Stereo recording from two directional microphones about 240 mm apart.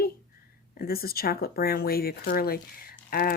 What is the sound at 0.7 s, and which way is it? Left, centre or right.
Speech, left.